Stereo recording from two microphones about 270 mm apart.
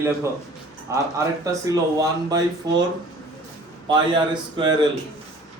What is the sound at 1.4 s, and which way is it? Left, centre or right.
Speech, centre.